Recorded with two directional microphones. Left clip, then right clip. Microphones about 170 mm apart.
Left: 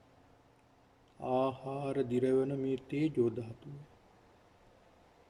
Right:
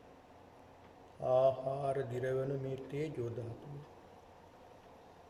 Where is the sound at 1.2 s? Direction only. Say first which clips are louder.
Right 3 dB; 55° left (ahead or behind).